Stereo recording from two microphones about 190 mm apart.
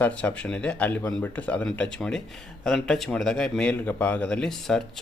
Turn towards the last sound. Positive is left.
turn(degrees=5)  # may be behind; listen again after turning